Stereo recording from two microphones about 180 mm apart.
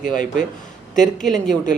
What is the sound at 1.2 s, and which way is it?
Speech, centre (ahead or behind).